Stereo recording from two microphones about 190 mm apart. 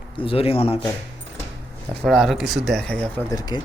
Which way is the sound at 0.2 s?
30° left (ahead or behind).